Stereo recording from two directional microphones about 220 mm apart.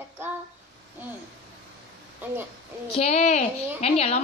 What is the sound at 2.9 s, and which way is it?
A woman's voice, 30° left (ahead or behind).